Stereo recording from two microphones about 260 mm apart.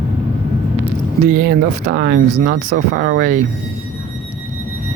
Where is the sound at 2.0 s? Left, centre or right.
Right.